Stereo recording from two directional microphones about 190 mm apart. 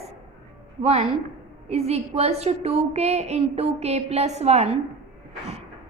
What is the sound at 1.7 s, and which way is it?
A woman's voice, 35° right (ahead or behind).